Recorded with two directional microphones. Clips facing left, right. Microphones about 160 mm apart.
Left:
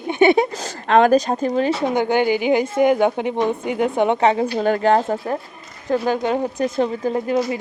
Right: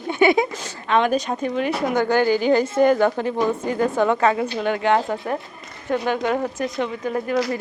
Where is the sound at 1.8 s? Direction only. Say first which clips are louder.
Left 1 dB; 20° left (ahead or behind).